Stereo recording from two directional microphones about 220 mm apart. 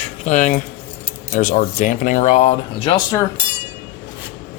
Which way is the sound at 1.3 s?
35° left (ahead or behind).